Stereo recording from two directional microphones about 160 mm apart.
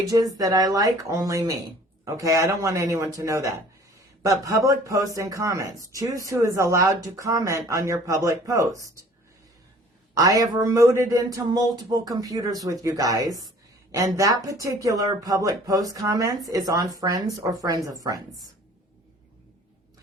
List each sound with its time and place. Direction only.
0.1 s speech: 20° right (ahead or behind)
10.2 s speech: 20° right (ahead or behind)